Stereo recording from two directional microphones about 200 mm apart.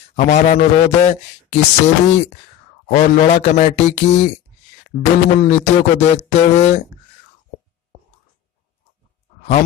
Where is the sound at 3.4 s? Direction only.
35° left (ahead or behind).